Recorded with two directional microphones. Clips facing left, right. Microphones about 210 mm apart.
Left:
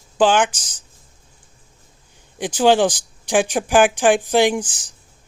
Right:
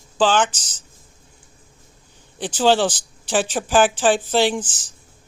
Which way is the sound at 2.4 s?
10° left (ahead or behind).